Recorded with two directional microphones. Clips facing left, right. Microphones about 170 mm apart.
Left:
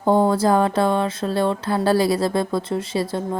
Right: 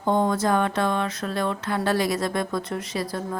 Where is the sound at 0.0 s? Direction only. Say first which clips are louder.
Left 5 dB; 35° left (ahead or behind).